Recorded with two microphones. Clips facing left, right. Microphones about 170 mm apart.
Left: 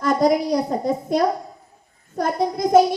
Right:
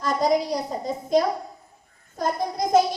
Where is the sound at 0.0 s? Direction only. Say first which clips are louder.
Left 6 dB; 50° left (ahead or behind).